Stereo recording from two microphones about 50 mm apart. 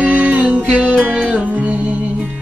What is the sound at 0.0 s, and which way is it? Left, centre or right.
Music, right.